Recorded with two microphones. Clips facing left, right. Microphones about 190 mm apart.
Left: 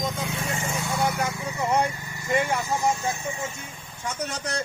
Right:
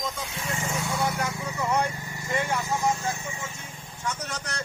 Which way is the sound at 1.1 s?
25° left (ahead or behind).